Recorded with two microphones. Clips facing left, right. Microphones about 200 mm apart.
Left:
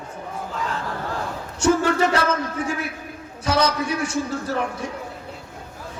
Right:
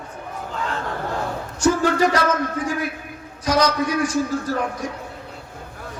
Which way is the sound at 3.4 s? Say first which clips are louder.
Right 2 dB; 25° left (ahead or behind).